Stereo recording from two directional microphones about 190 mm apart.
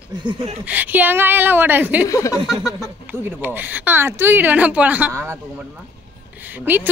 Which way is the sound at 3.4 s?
10° right (ahead or behind).